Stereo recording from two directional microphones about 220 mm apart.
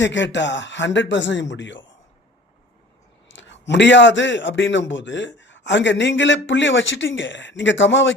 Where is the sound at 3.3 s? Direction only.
55° left (ahead or behind).